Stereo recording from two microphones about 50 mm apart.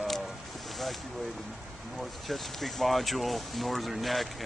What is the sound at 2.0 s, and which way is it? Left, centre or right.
Speech, centre.